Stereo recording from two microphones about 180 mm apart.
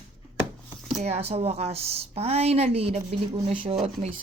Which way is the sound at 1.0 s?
35° right (ahead or behind).